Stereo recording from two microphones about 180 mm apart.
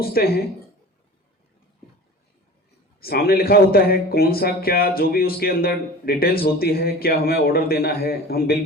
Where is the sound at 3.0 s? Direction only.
60° left (ahead or behind).